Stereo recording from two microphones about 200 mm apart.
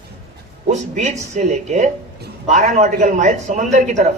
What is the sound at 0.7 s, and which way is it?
A man's voice, 35° right (ahead or behind).